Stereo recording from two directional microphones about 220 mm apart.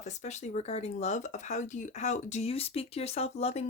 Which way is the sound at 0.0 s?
30° left (ahead or behind).